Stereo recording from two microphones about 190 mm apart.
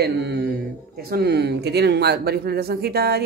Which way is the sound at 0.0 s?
60° right (ahead or behind).